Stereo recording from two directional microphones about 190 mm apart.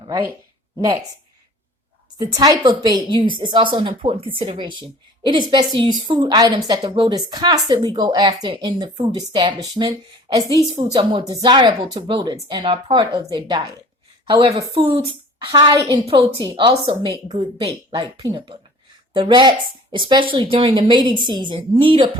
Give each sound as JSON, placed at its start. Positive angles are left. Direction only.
{"t": 2.2, "sound": "a woman's voice", "side_deg": -20}